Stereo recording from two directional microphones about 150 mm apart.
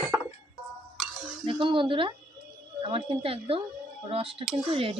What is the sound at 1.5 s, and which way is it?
Speech, 35° right (ahead or behind).